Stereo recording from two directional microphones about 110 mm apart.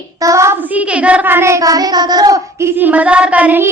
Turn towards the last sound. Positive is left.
turn(degrees=-15)  # may be behind; listen again after turning